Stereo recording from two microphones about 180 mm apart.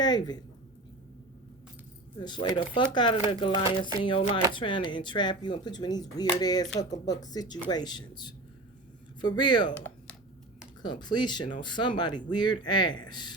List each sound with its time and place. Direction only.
0.0 s a woman's voice: 25° left (ahead or behind)
2.1 s speech: 25° left (ahead or behind)
9.7 s typing: 10° left (ahead or behind)
10.8 s speech: 25° left (ahead or behind)